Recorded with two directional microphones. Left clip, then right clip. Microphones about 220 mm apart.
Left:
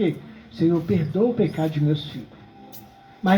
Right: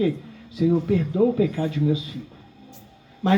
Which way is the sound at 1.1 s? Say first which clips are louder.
Even; 55° right (ahead or behind).